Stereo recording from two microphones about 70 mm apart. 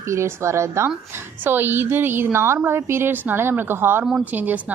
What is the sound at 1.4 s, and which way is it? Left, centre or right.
A woman's voice, right.